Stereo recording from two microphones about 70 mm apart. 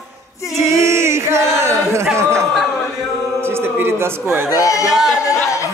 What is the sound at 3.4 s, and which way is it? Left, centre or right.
A man's voice, right.